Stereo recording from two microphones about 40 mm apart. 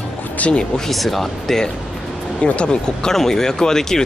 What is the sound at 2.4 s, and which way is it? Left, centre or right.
Speech, left.